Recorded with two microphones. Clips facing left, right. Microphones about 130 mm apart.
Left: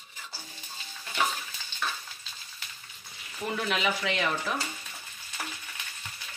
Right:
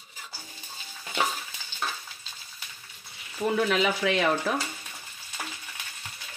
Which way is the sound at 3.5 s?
55° right (ahead or behind).